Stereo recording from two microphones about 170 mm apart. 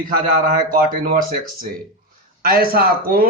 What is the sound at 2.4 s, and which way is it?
Speech, 60° right (ahead or behind).